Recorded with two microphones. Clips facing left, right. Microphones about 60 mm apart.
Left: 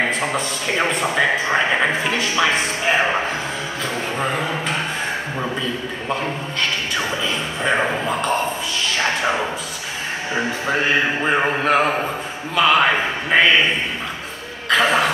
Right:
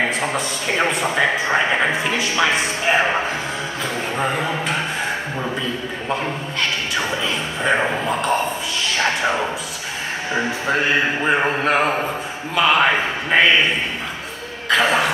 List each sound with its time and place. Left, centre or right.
0.0 s a man's voice: centre
7.6 s a man's voice: centre
14.7 s a man's voice: centre